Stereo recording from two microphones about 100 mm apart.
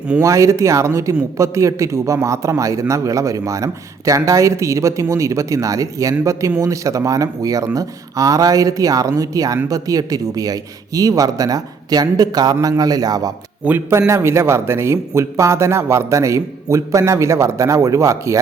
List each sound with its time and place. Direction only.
0.2 s a man's voice: 30° right (ahead or behind)
13.7 s speech: 20° right (ahead or behind)